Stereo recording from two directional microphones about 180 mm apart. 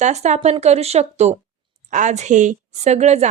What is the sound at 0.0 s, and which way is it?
Speech, 40° right (ahead or behind).